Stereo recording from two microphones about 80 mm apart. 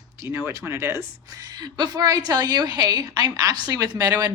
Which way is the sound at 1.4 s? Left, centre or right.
Right.